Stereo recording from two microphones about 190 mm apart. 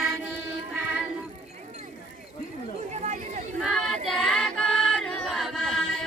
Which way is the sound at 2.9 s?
35° right (ahead or behind).